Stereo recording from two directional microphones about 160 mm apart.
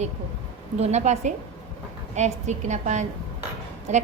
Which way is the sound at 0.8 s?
45° right (ahead or behind).